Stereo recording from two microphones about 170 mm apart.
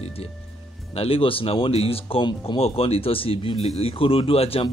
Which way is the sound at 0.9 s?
35° left (ahead or behind).